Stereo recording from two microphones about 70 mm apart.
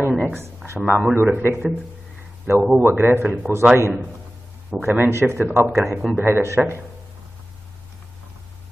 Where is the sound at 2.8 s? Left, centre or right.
Right.